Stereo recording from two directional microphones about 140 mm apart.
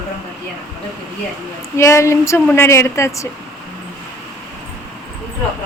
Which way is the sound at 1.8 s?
20° left (ahead or behind).